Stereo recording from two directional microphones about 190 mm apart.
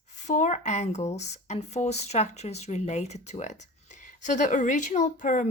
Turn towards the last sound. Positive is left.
turn(degrees=40)  # may be behind; listen again after turning